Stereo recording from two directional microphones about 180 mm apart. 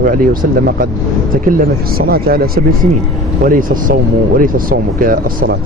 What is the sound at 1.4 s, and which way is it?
Speech, 55° right (ahead or behind).